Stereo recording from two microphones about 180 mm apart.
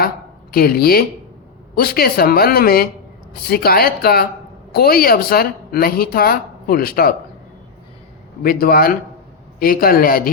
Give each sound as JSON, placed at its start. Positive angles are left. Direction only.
{"t": 0.5, "sound": "speech", "side_deg": 55}
{"t": 8.4, "sound": "a man's voice", "side_deg": 55}